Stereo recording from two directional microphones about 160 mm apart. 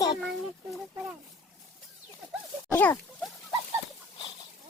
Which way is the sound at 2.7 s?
10° left (ahead or behind).